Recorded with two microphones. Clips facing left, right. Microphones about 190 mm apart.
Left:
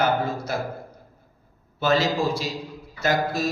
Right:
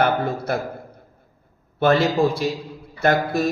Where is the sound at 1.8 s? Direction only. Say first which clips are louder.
Right 5 dB; 55° right (ahead or behind).